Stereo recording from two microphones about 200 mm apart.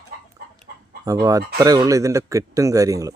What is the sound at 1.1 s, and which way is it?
Speech, 20° right (ahead or behind).